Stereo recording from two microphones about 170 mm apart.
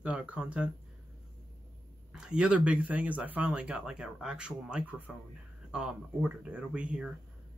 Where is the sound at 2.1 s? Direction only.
5° right (ahead or behind).